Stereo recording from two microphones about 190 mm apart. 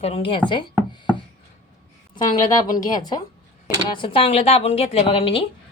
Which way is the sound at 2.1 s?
20° left (ahead or behind).